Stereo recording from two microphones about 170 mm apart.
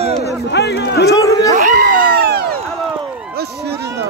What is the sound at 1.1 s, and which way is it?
Speech, 20° left (ahead or behind).